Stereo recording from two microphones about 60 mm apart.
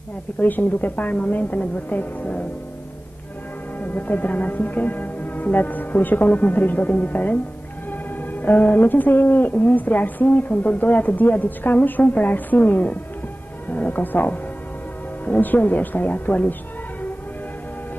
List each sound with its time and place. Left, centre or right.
0.4 s speech: left
3.8 s speech: left